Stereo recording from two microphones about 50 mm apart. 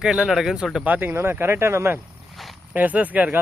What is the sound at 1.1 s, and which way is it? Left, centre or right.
Speech, right.